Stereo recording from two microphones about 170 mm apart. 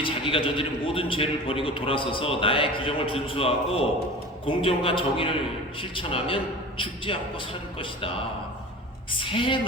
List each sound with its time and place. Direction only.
0.0 s a man's voice: 30° left (ahead or behind)
9.1 s a man's voice: 30° left (ahead or behind)